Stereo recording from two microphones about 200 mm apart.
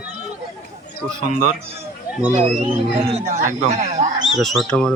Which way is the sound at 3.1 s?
30° right (ahead or behind).